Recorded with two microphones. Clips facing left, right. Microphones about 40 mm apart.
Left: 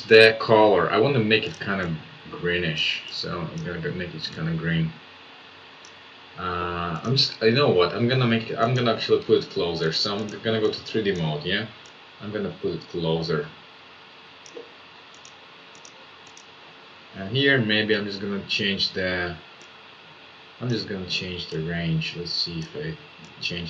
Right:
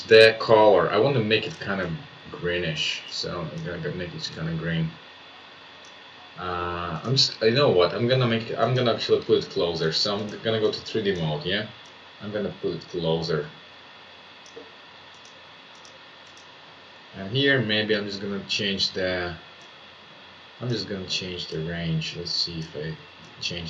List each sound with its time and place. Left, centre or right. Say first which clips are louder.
0.0 s speech: even; centre
6.3 s speech: left 1 dB; centre
17.2 s speech: left 1 dB; centre
20.7 s speech: left 1 dB; centre